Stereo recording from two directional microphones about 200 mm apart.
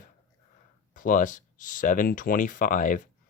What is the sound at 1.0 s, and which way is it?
Speech, 40° left (ahead or behind).